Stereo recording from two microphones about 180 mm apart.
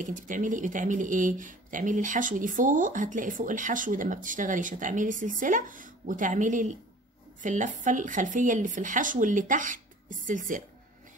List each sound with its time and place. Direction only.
0.0 s speech: 45° right (ahead or behind)